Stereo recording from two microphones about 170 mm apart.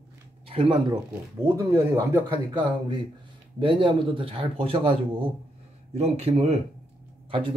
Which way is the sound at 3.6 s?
30° right (ahead or behind).